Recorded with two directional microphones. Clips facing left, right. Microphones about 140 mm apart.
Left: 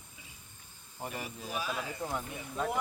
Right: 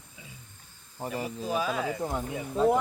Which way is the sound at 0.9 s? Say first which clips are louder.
Right 7 dB; 30° right (ahead or behind).